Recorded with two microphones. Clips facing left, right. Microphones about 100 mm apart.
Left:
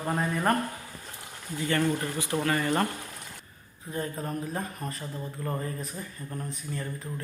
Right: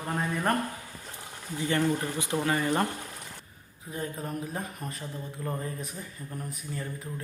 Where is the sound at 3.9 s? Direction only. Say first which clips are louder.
Left 2 dB; centre (ahead or behind).